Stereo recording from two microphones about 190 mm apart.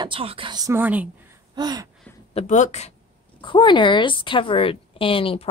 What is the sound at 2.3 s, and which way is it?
Speech, 40° left (ahead or behind).